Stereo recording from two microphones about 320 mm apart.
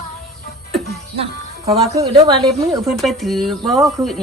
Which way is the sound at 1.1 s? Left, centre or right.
Centre.